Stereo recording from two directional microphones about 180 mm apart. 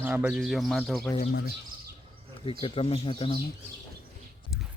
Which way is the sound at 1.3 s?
60° left (ahead or behind).